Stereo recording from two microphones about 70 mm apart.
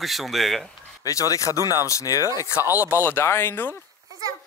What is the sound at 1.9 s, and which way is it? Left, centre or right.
Speech, left.